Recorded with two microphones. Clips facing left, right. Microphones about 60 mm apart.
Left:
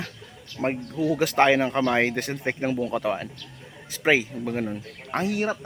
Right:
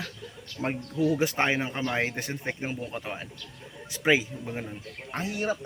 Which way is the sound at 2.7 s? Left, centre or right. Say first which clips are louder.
Left 9 dB; left.